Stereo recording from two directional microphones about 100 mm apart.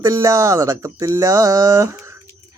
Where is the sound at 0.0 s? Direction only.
30° right (ahead or behind).